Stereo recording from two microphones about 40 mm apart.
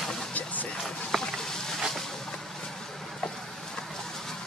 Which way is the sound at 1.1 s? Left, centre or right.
Centre.